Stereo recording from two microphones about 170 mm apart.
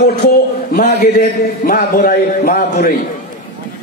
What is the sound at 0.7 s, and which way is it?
A man's voice, 45° left (ahead or behind).